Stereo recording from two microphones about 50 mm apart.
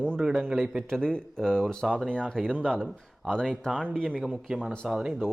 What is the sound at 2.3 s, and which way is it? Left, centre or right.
Speech, centre.